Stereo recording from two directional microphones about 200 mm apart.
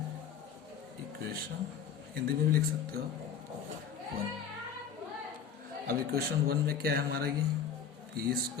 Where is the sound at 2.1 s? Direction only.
50° right (ahead or behind).